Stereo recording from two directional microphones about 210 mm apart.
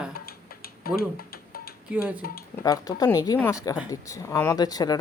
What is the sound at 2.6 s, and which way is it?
Speech, 15° left (ahead or behind).